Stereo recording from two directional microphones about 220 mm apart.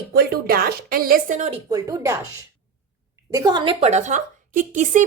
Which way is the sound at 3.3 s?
20° right (ahead or behind).